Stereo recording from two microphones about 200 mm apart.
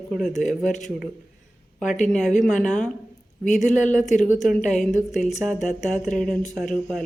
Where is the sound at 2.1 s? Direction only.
Centre (ahead or behind).